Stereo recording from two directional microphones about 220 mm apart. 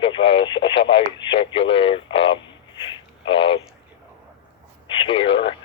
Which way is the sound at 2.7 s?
20° left (ahead or behind).